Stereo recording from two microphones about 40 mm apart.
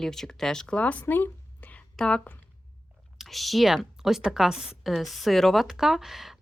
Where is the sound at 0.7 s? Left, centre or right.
Left.